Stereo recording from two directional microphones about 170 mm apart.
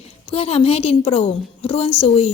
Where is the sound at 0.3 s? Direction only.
35° left (ahead or behind).